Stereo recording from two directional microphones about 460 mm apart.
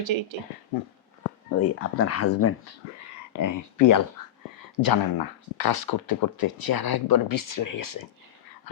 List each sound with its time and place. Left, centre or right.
0.0 s speech: right
1.5 s speech: left
3.3 s speech: left